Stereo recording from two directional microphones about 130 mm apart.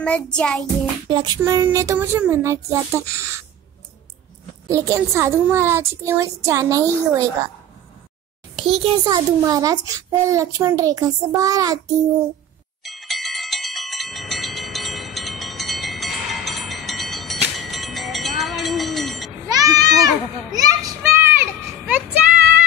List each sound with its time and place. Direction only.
0.0 s music: 5° left (ahead or behind)
1.0 s music: 35° right (ahead or behind)
1.4 s a child's voice: 20° right (ahead or behind)
4.6 s a child's voice: 20° right (ahead or behind)
8.5 s a child's voice: 50° right (ahead or behind)
9.0 s a child's voice: 30° right (ahead or behind)
12.8 s bell: centre (ahead or behind)
19.4 s goat: 25° right (ahead or behind)
20.5 s children playing: 30° right (ahead or behind)
21.0 s children playing: 20° right (ahead or behind)